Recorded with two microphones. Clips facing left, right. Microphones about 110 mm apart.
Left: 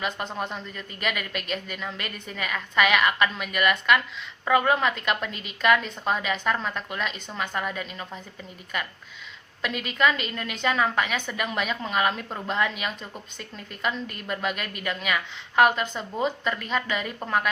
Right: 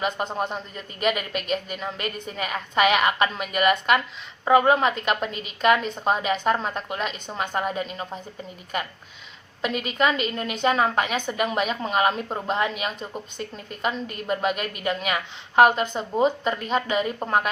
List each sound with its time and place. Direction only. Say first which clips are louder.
0.3 s a woman's voice: right 4 dB; 15° right (ahead or behind)
0.5 s a woman's voice: right 2 dB; 30° right (ahead or behind)
9.6 s a woman's voice: right 2 dB; 25° right (ahead or behind)